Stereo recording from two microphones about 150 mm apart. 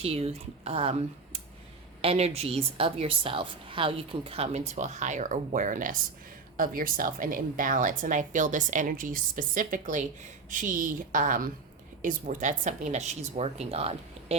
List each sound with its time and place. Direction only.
0.0 s a woman's voice: 45° right (ahead or behind)
4.7 s a woman's voice: 50° right (ahead or behind)